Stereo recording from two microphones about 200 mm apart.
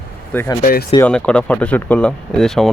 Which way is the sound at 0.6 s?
45° left (ahead or behind).